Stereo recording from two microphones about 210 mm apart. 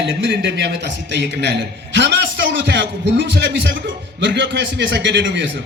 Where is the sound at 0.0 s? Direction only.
55° right (ahead or behind).